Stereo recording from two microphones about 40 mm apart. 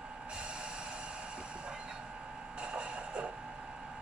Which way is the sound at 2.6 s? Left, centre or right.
Right.